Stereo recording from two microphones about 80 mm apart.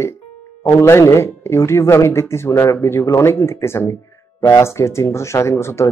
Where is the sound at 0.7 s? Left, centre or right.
Left.